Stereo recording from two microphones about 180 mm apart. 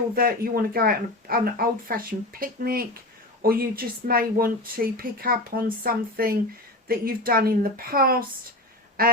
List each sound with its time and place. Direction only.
0.2 s speech: 55° right (ahead or behind)